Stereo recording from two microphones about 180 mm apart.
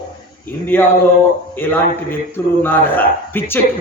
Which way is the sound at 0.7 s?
10° left (ahead or behind).